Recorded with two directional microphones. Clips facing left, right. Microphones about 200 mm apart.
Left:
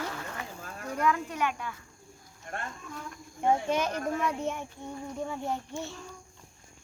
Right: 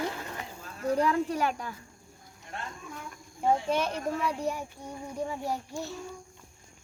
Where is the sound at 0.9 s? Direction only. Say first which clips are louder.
Right 3 dB; 35° right (ahead or behind).